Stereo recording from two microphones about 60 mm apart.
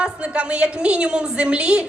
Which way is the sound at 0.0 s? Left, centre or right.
Centre.